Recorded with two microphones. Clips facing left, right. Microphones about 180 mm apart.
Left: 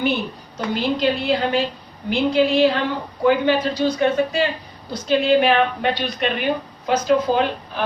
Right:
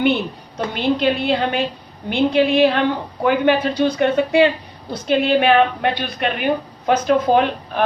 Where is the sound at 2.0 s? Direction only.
60° right (ahead or behind).